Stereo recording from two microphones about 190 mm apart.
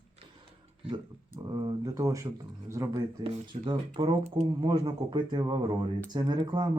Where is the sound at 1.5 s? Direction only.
20° right (ahead or behind).